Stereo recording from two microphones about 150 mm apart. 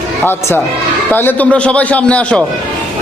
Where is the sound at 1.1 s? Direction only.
15° left (ahead or behind).